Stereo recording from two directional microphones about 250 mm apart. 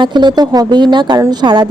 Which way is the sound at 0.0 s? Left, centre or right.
Centre.